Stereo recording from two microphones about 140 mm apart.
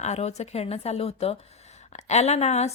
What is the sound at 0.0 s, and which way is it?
Speech, 50° left (ahead or behind).